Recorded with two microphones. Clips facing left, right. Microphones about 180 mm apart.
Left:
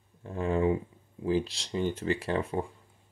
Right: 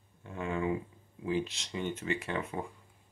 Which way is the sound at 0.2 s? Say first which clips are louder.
Left 6 dB; 35° left (ahead or behind).